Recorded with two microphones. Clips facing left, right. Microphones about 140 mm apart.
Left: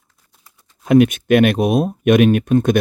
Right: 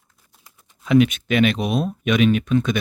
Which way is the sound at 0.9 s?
50° left (ahead or behind).